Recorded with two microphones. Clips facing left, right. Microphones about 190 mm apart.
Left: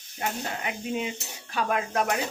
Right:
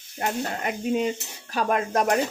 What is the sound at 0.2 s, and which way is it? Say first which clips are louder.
Dishes: right 4 dB; 45° right (ahead or behind).